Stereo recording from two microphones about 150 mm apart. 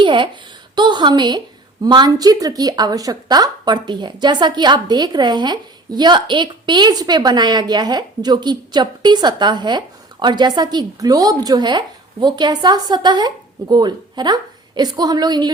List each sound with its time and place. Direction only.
0.0 s a woman's voice: 30° right (ahead or behind)